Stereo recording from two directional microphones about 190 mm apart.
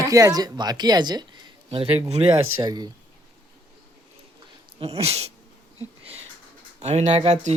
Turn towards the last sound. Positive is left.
turn(degrees=-35)  # may be behind; listen again after turning